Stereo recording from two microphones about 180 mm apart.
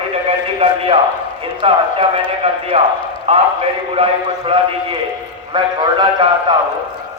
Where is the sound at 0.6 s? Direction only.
30° right (ahead or behind).